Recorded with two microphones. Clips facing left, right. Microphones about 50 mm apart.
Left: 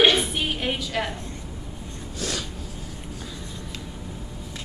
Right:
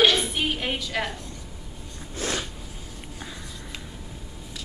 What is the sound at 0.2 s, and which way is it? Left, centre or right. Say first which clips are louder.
Music: even; centre.